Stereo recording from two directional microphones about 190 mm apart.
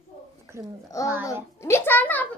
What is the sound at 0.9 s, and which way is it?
A child's voice, 15° left (ahead or behind).